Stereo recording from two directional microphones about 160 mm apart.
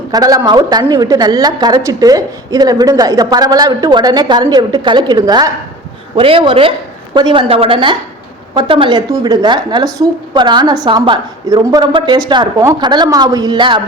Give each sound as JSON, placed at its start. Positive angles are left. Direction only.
{"t": 0.1, "sound": "a woman's voice", "side_deg": -25}